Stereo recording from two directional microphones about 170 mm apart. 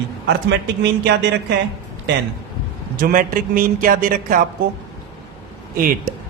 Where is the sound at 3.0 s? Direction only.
55° right (ahead or behind).